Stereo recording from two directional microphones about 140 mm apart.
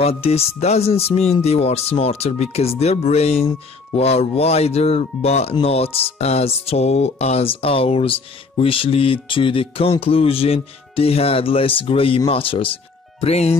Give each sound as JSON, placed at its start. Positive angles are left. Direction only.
{"t": 0.0, "sound": "speech", "side_deg": 45}